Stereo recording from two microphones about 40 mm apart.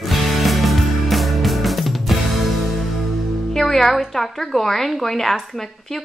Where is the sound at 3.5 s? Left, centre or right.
Centre.